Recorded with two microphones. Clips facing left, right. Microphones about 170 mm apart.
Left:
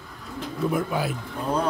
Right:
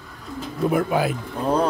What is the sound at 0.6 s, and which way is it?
Speech, 70° right (ahead or behind).